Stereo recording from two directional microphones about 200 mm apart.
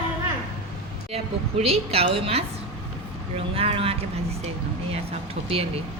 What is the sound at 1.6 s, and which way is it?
Speech, 30° right (ahead or behind).